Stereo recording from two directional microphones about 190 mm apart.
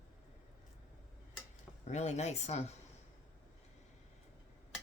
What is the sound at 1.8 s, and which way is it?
Speech, 35° left (ahead or behind).